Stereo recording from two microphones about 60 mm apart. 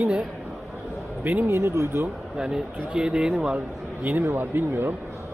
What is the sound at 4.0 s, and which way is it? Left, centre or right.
Speech, right.